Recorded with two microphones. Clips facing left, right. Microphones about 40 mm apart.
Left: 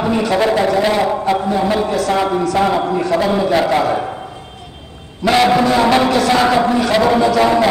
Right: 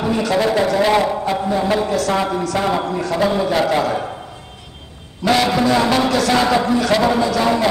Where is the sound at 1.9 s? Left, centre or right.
Left.